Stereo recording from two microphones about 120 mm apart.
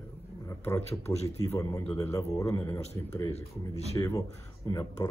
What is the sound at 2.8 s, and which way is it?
Speech, 65° left (ahead or behind).